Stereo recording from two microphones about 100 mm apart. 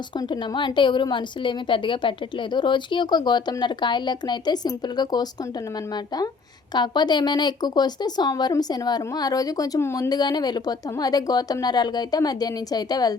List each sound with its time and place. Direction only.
0.2 s speech: 50° left (ahead or behind)
6.7 s speech: 45° left (ahead or behind)